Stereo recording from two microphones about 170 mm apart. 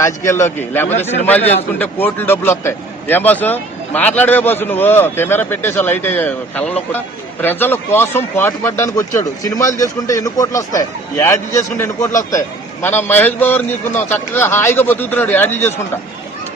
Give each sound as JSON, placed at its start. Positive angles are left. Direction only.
{"t": 0.3, "sound": "speech", "side_deg": 15}
{"t": 1.4, "sound": "a man's voice", "side_deg": 40}
{"t": 1.8, "sound": "speech", "side_deg": 10}